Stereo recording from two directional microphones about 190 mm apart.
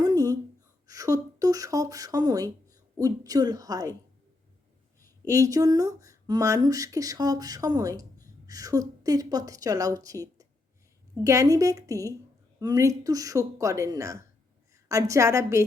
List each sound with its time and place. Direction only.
0.0 s a sound: 20° right (ahead or behind)
0.9 s speech: 15° right (ahead or behind)
5.2 s speech: 15° right (ahead or behind)